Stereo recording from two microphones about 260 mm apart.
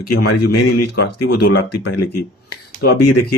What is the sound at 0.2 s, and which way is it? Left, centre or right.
A man's voice, left.